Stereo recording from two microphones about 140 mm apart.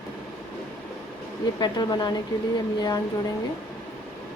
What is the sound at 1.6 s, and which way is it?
Speech, 30° left (ahead or behind).